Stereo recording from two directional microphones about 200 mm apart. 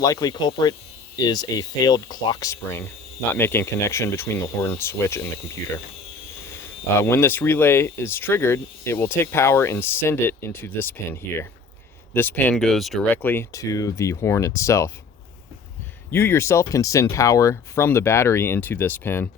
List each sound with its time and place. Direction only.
0.0 s speech: 15° left (ahead or behind)
7.0 s speech: 10° left (ahead or behind)
16.1 s speech: 10° left (ahead or behind)